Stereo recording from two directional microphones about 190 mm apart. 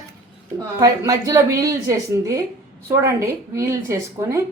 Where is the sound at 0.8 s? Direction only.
20° right (ahead or behind).